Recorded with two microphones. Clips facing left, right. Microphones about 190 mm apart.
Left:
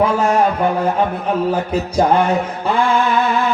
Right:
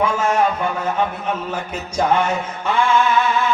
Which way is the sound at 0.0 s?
35° left (ahead or behind).